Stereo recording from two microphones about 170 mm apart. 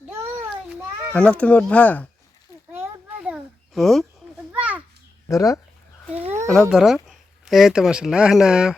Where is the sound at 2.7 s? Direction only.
10° right (ahead or behind).